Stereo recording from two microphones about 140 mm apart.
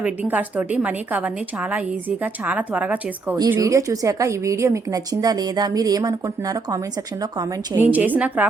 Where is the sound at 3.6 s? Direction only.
25° right (ahead or behind).